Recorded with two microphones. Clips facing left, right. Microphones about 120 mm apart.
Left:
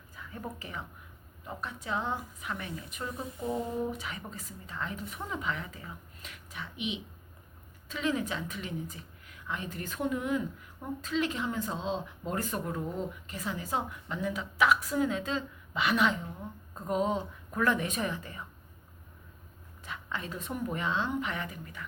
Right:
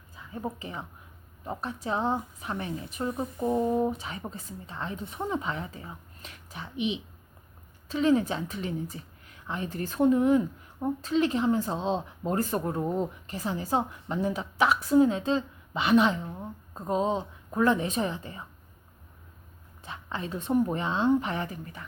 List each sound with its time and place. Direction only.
0.2 s a woman's voice: 25° right (ahead or behind)
19.8 s a woman's voice: 30° right (ahead or behind)